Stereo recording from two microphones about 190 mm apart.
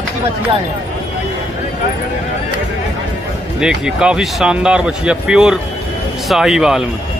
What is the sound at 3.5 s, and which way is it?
Speech, 5° right (ahead or behind).